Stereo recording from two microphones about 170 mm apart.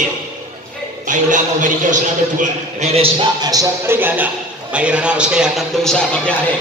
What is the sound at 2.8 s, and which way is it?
Speech, 40° right (ahead or behind).